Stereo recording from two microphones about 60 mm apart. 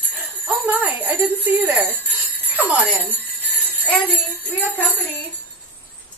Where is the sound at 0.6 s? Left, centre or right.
Right.